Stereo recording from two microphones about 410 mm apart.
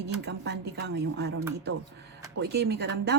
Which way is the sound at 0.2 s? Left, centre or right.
Right.